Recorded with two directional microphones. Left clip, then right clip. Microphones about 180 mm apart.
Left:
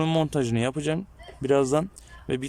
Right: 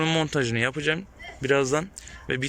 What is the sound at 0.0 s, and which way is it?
Speech, 15° left (ahead or behind).